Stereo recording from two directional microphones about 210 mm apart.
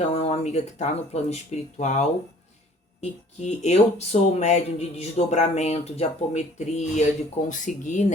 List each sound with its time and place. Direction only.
0.1 s speech: 30° left (ahead or behind)